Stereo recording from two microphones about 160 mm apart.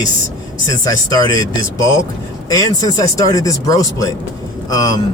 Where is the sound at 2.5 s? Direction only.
25° left (ahead or behind).